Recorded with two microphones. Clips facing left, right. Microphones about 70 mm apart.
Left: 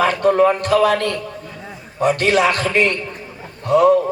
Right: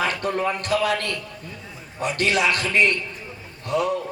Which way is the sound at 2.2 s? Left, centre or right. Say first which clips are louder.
Left 2 dB; left.